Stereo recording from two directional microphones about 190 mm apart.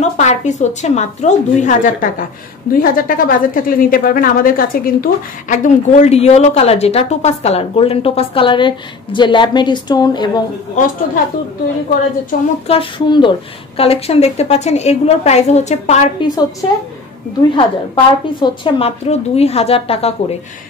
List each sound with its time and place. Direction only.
0.0 s a woman's voice: 40° left (ahead or behind); by 10.4 s 20° left (ahead or behind)
12.6 s a woman's voice: 30° left (ahead or behind)
17.4 s a woman's voice: 25° left (ahead or behind)